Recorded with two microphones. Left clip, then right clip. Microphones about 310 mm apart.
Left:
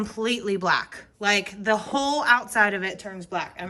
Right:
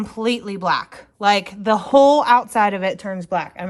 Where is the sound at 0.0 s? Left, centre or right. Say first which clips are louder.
Right 4 dB; centre.